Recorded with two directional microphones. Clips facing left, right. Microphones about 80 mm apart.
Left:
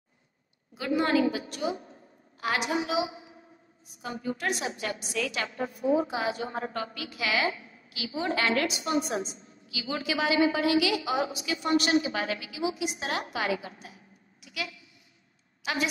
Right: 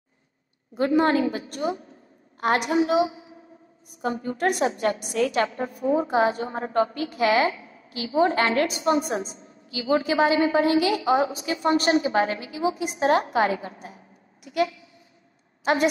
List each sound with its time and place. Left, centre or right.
0.7 s a woman's voice: right